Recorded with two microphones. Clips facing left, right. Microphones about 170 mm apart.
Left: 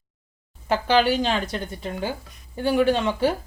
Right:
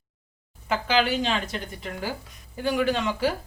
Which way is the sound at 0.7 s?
35° left (ahead or behind).